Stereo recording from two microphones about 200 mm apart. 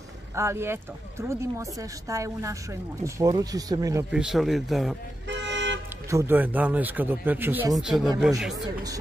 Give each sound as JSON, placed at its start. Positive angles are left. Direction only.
{"t": 0.4, "sound": "speech", "side_deg": -10}
{"t": 4.1, "sound": "speech", "side_deg": -5}
{"t": 5.3, "sound": "toot", "side_deg": -60}
{"t": 6.0, "sound": "speech", "side_deg": -15}